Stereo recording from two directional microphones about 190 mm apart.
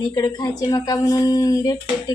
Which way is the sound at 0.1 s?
20° left (ahead or behind).